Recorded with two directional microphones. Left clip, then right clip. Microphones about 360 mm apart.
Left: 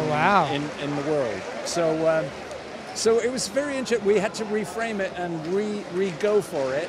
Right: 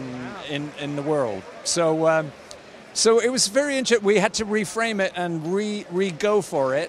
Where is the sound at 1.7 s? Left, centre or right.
Right.